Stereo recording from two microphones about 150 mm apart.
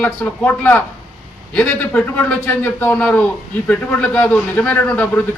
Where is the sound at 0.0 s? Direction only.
10° left (ahead or behind).